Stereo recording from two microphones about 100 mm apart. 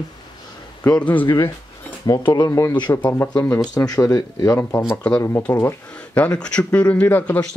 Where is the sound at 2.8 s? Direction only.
50° left (ahead or behind).